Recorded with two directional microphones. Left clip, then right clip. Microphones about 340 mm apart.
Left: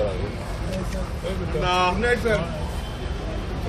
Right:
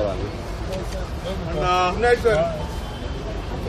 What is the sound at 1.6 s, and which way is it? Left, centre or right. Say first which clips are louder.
Speech: right 2 dB; right.